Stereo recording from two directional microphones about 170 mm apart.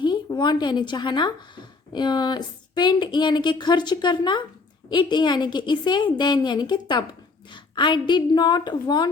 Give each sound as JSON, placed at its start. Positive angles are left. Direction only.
{"t": 0.0, "sound": "a woman's voice", "side_deg": 25}